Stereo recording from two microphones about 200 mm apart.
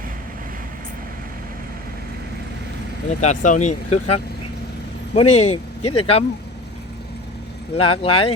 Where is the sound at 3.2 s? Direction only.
35° left (ahead or behind).